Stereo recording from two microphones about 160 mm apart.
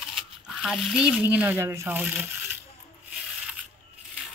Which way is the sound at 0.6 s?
Centre (ahead or behind).